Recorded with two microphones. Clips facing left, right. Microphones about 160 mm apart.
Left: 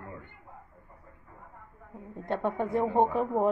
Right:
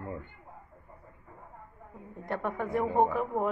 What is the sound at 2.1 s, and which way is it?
Speech, 25° left (ahead or behind).